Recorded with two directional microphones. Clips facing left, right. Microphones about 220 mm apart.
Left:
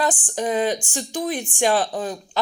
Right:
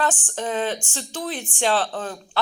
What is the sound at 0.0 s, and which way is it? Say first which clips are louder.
Speech: left 2 dB; 15° left (ahead or behind).